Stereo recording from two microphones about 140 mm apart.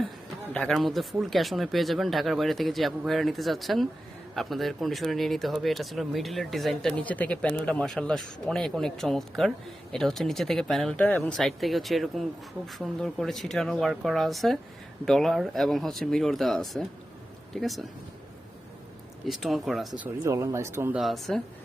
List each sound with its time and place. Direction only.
0.5 s speech: 5° left (ahead or behind)
19.2 s speech: centre (ahead or behind)
20.2 s speech: 20° right (ahead or behind)
21.0 s speech: centre (ahead or behind)